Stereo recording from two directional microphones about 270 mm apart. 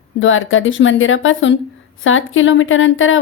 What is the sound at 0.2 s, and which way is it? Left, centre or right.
A woman's voice, left.